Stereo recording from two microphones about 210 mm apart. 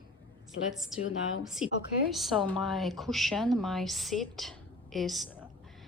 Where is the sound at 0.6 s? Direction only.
55° left (ahead or behind).